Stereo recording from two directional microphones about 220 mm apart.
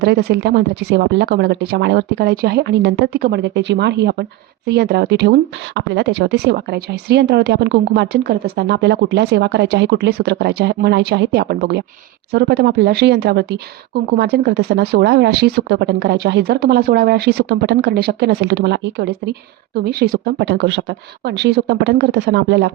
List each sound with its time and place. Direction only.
0.0 s speech: 50° right (ahead or behind)